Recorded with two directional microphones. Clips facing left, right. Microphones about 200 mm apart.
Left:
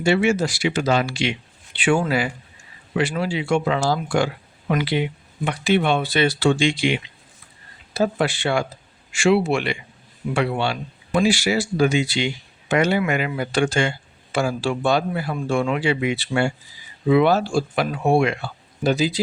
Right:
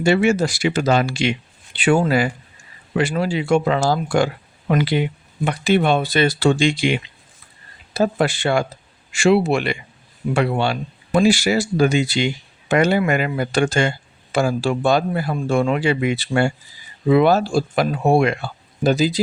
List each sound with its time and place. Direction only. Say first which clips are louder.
0.0 s a man's voice: right 2 dB; 45° right (ahead or behind)